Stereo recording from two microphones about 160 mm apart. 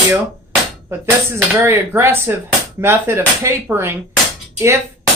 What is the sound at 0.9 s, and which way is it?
Speech, 15° right (ahead or behind).